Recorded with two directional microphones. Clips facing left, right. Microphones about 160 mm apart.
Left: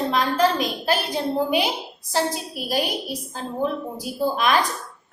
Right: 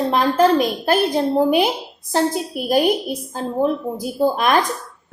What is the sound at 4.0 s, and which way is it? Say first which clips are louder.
Speech: right 4 dB; 50° right (ahead or behind).